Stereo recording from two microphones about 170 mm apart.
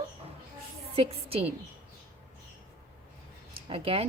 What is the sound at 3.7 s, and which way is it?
Speech, 35° right (ahead or behind).